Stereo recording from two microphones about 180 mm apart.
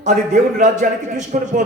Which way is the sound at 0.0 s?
45° right (ahead or behind).